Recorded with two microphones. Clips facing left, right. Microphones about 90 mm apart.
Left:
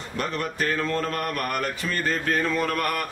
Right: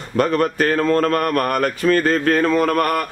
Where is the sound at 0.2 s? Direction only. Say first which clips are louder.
Right 10 dB; 55° right (ahead or behind).